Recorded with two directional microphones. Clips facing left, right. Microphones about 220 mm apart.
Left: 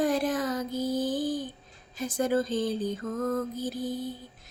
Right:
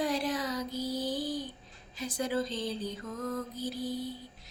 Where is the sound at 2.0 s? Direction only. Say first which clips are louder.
Left 5 dB; 50° left (ahead or behind).